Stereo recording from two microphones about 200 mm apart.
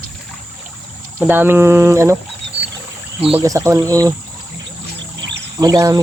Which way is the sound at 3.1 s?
30° right (ahead or behind).